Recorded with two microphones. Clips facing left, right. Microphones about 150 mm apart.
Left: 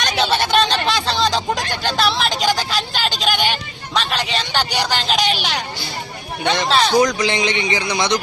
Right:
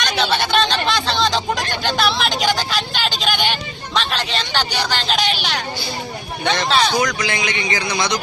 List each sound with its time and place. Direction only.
0.2 s a sound: 5° left (ahead or behind)
1.8 s vehicle: centre (ahead or behind)
6.4 s a man's voice: 5° left (ahead or behind)
7.2 s a man's voice: 25° left (ahead or behind)